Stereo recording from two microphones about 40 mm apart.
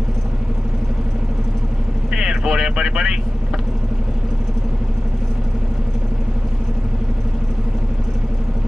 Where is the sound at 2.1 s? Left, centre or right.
Centre.